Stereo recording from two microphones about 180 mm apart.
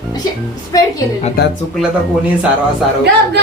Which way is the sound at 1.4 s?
55° left (ahead or behind).